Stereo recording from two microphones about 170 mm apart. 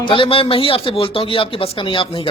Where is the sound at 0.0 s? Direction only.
30° left (ahead or behind).